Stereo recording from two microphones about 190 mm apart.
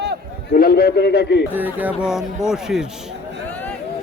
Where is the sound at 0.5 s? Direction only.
55° left (ahead or behind).